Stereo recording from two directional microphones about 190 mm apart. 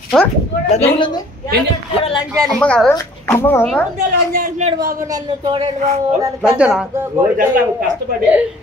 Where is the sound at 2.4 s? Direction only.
5° left (ahead or behind).